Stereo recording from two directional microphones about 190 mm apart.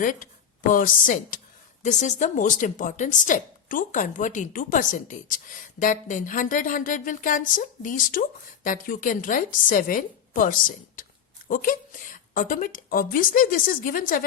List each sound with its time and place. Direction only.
0.0 s a woman's voice: 45° left (ahead or behind)